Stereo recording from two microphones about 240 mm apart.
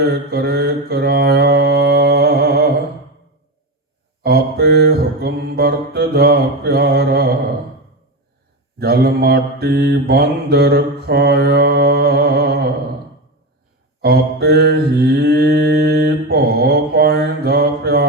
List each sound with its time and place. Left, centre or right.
0.0 s mantra: right
4.2 s mantra: right
8.8 s mantra: right
14.0 s mantra: right